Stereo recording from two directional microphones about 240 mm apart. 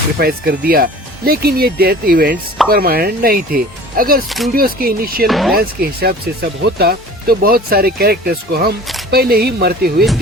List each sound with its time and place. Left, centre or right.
0.2 s speech: right
5.2 s speech: centre
5.5 s speech: right